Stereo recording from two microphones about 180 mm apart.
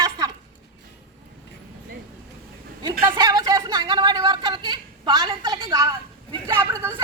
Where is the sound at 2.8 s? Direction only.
25° right (ahead or behind).